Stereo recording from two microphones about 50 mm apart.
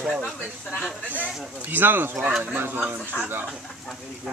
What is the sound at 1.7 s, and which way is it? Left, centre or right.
Speech, right.